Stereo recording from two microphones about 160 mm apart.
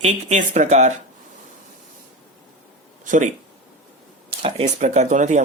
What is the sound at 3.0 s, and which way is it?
Speech, 50° right (ahead or behind).